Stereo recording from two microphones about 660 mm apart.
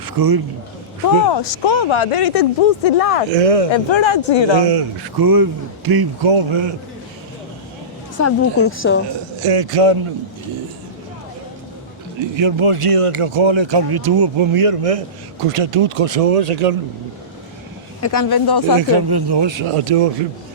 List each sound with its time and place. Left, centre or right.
0.0 s a man's voice: right
1.3 s speech: left
3.3 s speech: right
3.7 s a man's voice: left
4.6 s speech: right
5.1 s speech: right
6.2 s speech: right
8.2 s a woman's voice: centre
9.4 s speech: right
12.2 s speech: right
18.0 s a man's voice: left
18.8 s speech: right